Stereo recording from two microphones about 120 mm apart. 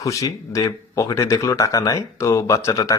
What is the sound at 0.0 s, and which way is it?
Speech, 25° left (ahead or behind).